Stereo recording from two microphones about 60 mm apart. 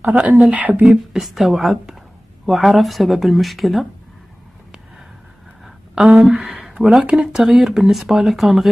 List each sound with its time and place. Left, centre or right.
0.0 s speech: right
1.1 s speech: centre
5.9 s speech: centre